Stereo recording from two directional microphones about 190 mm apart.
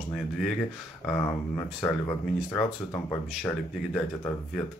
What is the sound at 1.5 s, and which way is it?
Speech, 15° left (ahead or behind).